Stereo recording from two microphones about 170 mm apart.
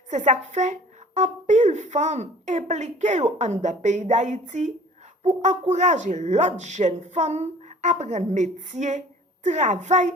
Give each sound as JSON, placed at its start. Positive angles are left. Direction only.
{"t": 0.1, "sound": "speech", "side_deg": -45}